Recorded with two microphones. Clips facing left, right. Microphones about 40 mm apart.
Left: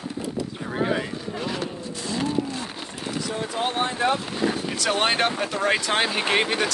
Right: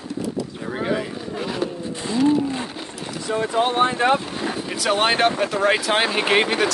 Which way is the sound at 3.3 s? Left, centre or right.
Right.